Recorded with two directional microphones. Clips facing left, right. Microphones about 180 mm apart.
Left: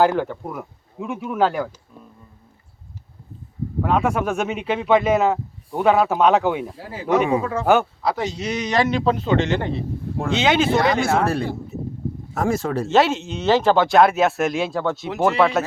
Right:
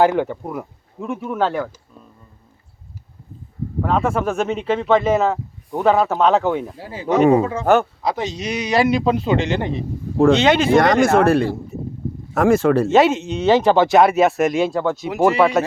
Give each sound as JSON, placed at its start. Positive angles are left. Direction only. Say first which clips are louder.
{"t": 0.0, "sound": "speech", "louder": "right 2 dB", "side_deg": 0}
{"t": 3.8, "sound": "speech", "louder": "right 1 dB", "side_deg": 5}
{"t": 7.2, "sound": "speech", "louder": "right 8 dB", "side_deg": -40}
{"t": 7.6, "sound": "speech", "louder": "right 2 dB", "side_deg": 10}
{"t": 8.0, "sound": "a man's voice", "louder": "right 1 dB", "side_deg": -20}
{"t": 10.3, "sound": "speech", "louder": "right 3 dB", "side_deg": 5}
{"t": 10.8, "sound": "speech", "louder": "right 5 dB", "side_deg": -90}
{"t": 12.3, "sound": "speech", "louder": "right 8 dB", "side_deg": -90}
{"t": 12.9, "sound": "speech", "louder": "right 3 dB", "side_deg": 0}